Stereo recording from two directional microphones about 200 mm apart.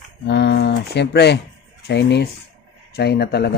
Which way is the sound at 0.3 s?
55° left (ahead or behind).